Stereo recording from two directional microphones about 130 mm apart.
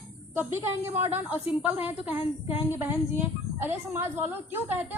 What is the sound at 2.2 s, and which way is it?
Speech, 50° left (ahead or behind).